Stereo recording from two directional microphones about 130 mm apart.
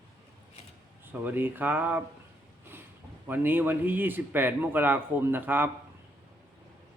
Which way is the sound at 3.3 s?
15° right (ahead or behind).